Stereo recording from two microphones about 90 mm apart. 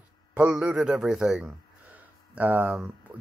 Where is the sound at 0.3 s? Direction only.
15° right (ahead or behind).